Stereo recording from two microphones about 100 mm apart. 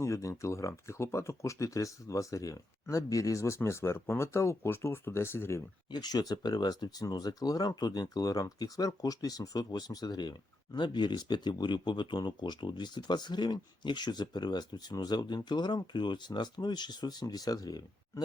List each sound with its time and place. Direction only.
0.0 s speech: 30° left (ahead or behind)
5.9 s speech: 45° left (ahead or behind)